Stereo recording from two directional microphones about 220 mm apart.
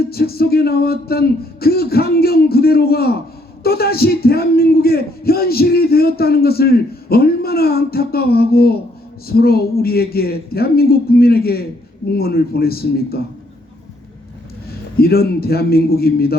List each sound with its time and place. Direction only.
0.1 s a man's voice: 45° left (ahead or behind)
14.9 s a man's voice: 45° left (ahead or behind)